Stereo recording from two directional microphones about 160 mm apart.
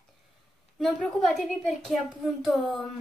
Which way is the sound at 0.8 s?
Centre (ahead or behind).